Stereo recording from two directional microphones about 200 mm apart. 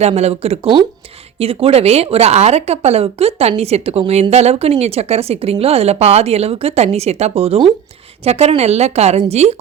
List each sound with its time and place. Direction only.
0.0 s speech: 30° right (ahead or behind)